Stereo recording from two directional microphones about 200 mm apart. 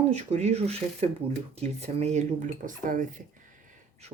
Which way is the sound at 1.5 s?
30° right (ahead or behind).